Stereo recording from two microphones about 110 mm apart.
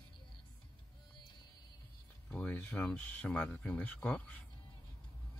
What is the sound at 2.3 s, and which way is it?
Speech, 15° left (ahead or behind).